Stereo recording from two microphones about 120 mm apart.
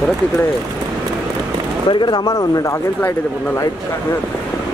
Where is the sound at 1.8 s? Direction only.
35° left (ahead or behind).